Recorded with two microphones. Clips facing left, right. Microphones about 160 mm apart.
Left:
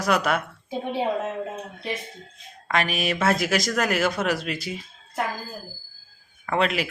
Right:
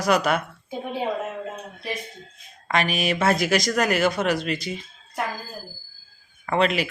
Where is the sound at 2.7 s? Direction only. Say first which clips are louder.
Right 1 dB; centre (ahead or behind).